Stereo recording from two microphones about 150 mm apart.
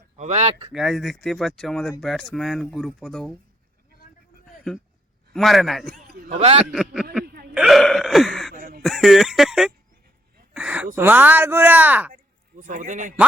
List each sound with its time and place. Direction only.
0.2 s speech: 50° right (ahead or behind)
0.7 s speech: centre (ahead or behind)
5.3 s speech: centre (ahead or behind)
6.3 s speech: 40° right (ahead or behind)
6.7 s a sound: 5° right (ahead or behind)
7.5 s hiccup: 5° right (ahead or behind)
8.5 s a sound: 65° right (ahead or behind)
8.8 s a sound: centre (ahead or behind)
10.5 s gasp: 10° right (ahead or behind)
10.9 s speech: 10° right (ahead or behind)
12.1 s speech: 60° right (ahead or behind)